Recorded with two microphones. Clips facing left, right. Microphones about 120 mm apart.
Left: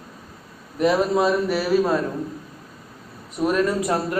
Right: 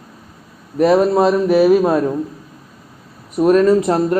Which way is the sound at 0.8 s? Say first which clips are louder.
Right 6 dB; 40° right (ahead or behind).